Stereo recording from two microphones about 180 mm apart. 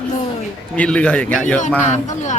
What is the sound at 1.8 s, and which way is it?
Speech, 40° left (ahead or behind).